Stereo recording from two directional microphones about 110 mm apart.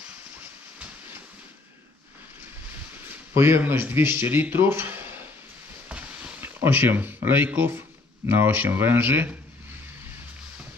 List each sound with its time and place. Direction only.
3.3 s speech: 20° right (ahead or behind)
5.9 s a sound: 10° right (ahead or behind)
6.6 s speech: 20° right (ahead or behind)